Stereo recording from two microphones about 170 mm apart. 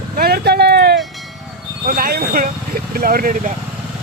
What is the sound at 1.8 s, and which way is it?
Speech, 55° right (ahead or behind).